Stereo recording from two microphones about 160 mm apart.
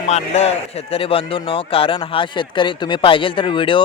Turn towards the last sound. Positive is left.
turn(degrees=30)  # may be behind; listen again after turning